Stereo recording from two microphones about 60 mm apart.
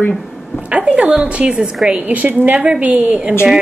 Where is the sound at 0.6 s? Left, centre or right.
Centre.